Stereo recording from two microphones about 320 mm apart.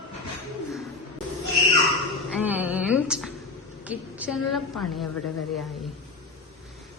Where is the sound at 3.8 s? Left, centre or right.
Centre.